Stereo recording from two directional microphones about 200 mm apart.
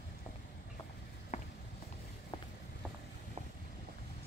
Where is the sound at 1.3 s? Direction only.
35° left (ahead or behind).